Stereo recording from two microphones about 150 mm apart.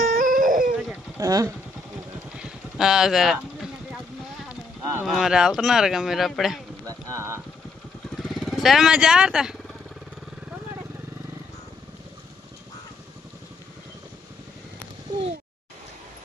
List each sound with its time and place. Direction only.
0.2 s a sound: 65° right (ahead or behind)
1.2 s speech: 20° right (ahead or behind)
2.4 s vehicle: 5° right (ahead or behind)
4.8 s clip-clop: 20° right (ahead or behind)
5.0 s speech: centre (ahead or behind)
6.8 s a sound: 20° right (ahead or behind)
8.2 s speech: centre (ahead or behind)